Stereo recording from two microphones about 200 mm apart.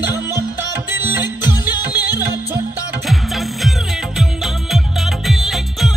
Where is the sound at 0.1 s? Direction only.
15° right (ahead or behind).